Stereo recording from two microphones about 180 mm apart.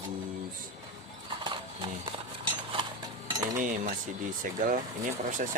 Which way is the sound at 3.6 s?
45° right (ahead or behind).